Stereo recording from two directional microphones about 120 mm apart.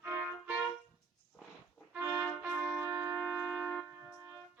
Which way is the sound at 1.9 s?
15° right (ahead or behind).